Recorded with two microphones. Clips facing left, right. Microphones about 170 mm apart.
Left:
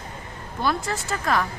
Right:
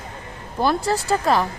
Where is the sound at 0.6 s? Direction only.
35° right (ahead or behind).